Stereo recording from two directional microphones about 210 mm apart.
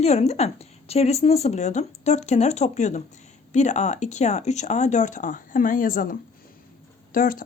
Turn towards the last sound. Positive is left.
turn(degrees=40)  # may be behind; listen again after turning